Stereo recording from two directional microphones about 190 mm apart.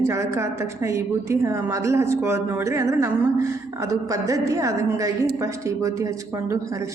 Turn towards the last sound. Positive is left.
turn(degrees=-15)  # may be behind; listen again after turning